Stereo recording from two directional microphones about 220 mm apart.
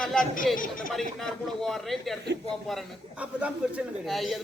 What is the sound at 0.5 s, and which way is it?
Speech, 40° left (ahead or behind).